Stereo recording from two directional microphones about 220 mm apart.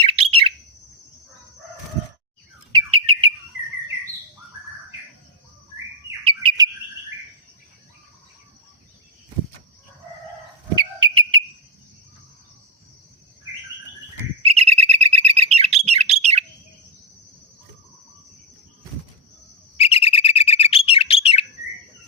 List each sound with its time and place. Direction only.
0.1 s bird: 25° right (ahead or behind)
2.7 s bird: 25° right (ahead or behind)
6.2 s chirp: 25° right (ahead or behind)
11.0 s whistle: 20° right (ahead or behind)
14.4 s bird: 25° right (ahead or behind)
19.7 s bird: 25° left (ahead or behind)